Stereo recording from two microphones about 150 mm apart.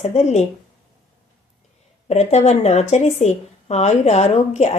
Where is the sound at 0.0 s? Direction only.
45° left (ahead or behind).